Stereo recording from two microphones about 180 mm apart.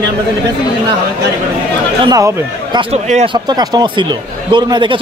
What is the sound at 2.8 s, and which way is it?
Speech, 35° right (ahead or behind).